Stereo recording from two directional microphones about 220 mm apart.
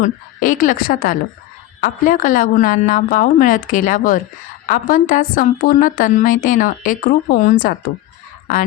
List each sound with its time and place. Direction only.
0.0 s a woman's voice: 35° left (ahead or behind)